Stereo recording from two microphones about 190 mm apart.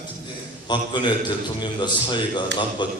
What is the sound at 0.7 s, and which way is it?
A man's voice, 25° left (ahead or behind).